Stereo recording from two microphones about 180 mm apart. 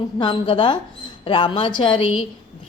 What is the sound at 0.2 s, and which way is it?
Speech, 25° left (ahead or behind).